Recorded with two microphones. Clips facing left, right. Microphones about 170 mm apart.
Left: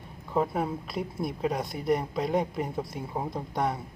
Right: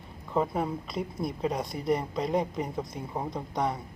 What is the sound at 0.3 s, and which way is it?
Speech, 5° left (ahead or behind).